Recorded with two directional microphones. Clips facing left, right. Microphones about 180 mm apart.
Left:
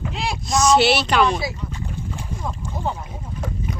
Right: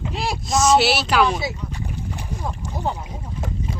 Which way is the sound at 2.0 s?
15° right (ahead or behind).